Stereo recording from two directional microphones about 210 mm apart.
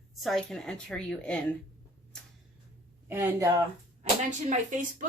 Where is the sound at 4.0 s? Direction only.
35° right (ahead or behind).